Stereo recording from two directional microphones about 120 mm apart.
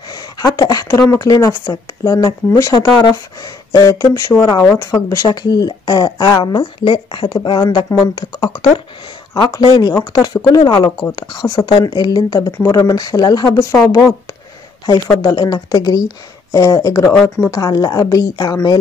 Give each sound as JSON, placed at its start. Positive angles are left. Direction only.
{"t": 0.1, "sound": "speech", "side_deg": 35}
{"t": 13.7, "sound": "speech", "side_deg": 20}
{"t": 15.2, "sound": "speech", "side_deg": 30}